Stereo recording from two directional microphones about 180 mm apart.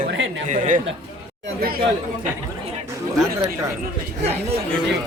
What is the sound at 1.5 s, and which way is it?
Speech, 55° right (ahead or behind).